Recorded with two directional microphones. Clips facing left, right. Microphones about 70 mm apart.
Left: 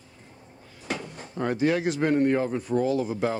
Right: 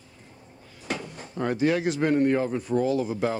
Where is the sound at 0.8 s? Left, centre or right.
Left.